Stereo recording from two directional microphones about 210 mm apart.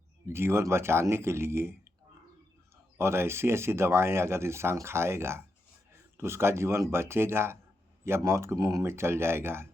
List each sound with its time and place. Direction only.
0.3 s speech: 10° right (ahead or behind)
3.0 s speech: 10° right (ahead or behind)